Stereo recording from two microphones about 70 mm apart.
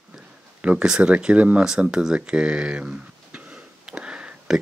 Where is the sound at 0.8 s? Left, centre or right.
Centre.